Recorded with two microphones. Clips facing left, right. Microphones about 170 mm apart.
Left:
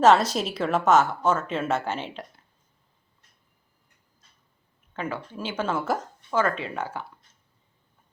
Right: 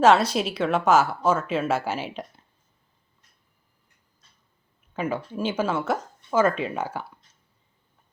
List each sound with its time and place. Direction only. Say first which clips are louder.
0.0 s speech: even; centre (ahead or behind)
4.9 s speech: right 4 dB; 15° right (ahead or behind)